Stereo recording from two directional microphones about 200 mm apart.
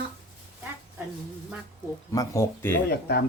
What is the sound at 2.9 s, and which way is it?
Speech, 50° left (ahead or behind).